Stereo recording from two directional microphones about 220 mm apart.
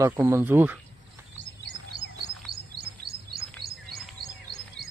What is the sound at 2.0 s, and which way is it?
Chirp, 55° left (ahead or behind).